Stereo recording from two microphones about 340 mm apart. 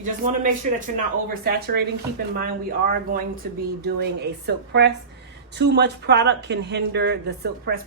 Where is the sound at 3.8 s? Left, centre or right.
Right.